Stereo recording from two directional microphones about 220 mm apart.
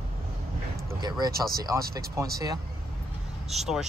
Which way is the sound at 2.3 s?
15° right (ahead or behind).